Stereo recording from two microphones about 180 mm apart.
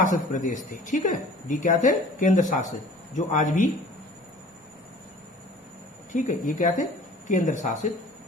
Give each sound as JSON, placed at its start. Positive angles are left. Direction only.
{"t": 0.0, "sound": "a woman's voice", "side_deg": 45}
{"t": 6.1, "sound": "a woman's voice", "side_deg": 45}